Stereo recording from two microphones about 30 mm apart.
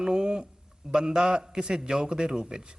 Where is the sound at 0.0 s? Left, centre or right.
Right.